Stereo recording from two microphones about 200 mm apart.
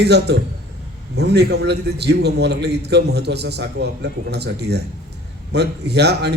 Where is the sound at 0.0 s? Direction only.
55° right (ahead or behind).